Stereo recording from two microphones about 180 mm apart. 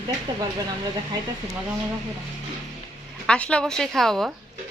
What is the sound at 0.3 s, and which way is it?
Speech, 25° right (ahead or behind).